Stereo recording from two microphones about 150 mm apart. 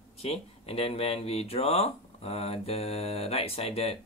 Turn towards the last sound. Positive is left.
turn(degrees=45)  # may be behind; listen again after turning